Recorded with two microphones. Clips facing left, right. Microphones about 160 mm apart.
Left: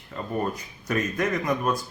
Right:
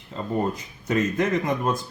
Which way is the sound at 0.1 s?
25° right (ahead or behind).